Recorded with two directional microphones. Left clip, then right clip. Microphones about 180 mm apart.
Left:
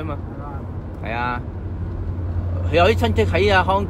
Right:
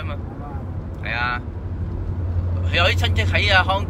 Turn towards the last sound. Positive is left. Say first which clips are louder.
# left 1 dB
turn(degrees=30)  # may be behind; listen again after turning